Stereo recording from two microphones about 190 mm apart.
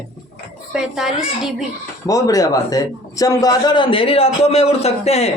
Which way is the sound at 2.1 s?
20° left (ahead or behind).